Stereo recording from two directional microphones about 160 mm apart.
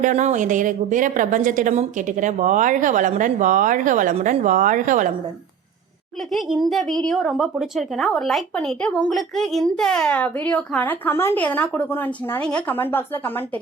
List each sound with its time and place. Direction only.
0.0 s a woman's voice: 50° right (ahead or behind)
6.3 s speech: centre (ahead or behind)